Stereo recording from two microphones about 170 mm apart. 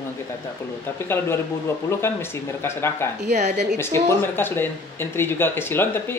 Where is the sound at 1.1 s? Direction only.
15° left (ahead or behind).